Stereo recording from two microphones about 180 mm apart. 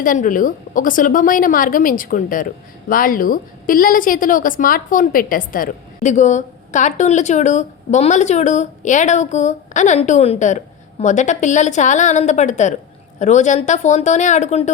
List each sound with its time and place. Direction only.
0.0 s a woman's voice: 50° left (ahead or behind)